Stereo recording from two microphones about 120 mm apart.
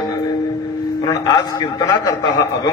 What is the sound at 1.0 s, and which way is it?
A man's voice, 30° left (ahead or behind).